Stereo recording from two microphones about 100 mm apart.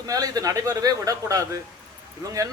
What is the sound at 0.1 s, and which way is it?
Speech, 35° right (ahead or behind).